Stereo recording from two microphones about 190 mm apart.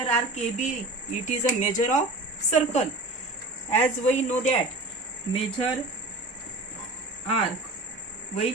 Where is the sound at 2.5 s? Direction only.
35° left (ahead or behind).